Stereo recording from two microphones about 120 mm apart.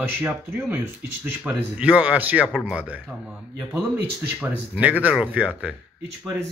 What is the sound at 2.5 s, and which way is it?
Speech, centre (ahead or behind).